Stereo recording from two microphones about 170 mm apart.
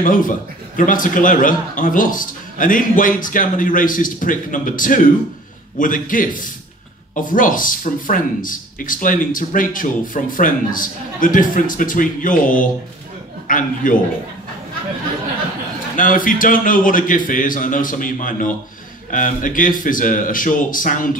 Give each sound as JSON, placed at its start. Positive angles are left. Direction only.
{"t": 0.0, "sound": "speech", "side_deg": 50}
{"t": 16.0, "sound": "speech", "side_deg": 50}